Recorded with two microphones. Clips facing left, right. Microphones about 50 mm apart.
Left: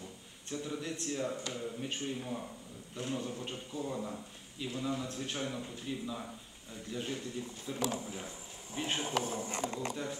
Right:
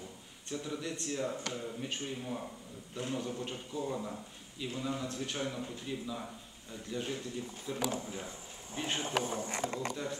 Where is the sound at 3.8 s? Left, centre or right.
Centre.